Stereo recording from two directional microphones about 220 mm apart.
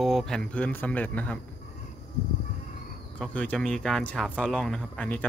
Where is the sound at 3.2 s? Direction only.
5° left (ahead or behind).